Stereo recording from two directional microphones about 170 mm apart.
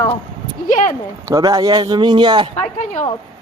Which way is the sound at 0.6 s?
50° left (ahead or behind).